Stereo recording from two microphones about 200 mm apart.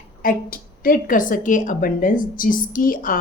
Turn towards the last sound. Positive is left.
turn(degrees=45)  # may be behind; listen again after turning